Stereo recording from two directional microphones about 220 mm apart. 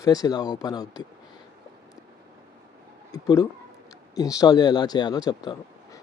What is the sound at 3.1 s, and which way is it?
Speech, 15° left (ahead or behind).